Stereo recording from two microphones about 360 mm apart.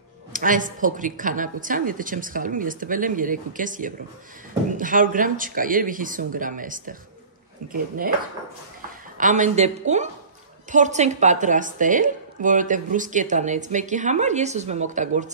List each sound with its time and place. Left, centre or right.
0.3 s a woman's voice: right
9.2 s a woman's voice: centre